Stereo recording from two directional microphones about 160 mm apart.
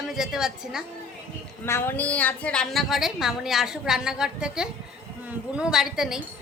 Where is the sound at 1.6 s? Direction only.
15° left (ahead or behind).